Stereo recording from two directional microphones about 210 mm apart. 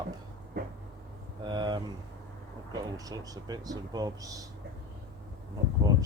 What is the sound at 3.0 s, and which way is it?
Speech, 15° right (ahead or behind).